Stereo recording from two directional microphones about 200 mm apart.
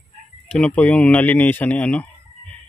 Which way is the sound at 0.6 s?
5° left (ahead or behind).